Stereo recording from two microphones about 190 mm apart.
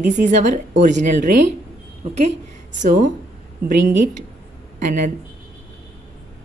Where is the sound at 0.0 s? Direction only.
40° right (ahead or behind).